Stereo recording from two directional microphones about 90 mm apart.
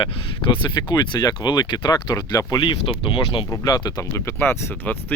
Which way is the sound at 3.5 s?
45° left (ahead or behind).